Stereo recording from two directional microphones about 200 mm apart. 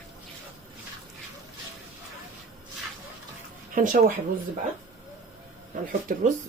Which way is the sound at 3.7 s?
40° right (ahead or behind).